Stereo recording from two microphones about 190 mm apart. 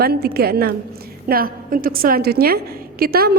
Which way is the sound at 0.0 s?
55° right (ahead or behind).